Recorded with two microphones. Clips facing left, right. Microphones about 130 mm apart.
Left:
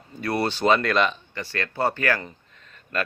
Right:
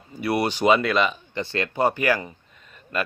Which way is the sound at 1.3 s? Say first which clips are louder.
Right 4 dB; 20° right (ahead or behind).